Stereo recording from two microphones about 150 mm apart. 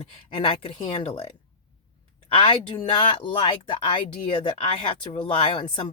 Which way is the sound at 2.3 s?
35° left (ahead or behind).